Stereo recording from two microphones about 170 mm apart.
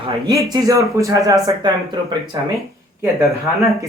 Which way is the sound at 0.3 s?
25° right (ahead or behind).